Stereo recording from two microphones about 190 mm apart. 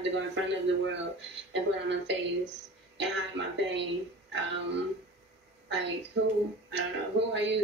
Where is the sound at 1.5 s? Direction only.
70° right (ahead or behind).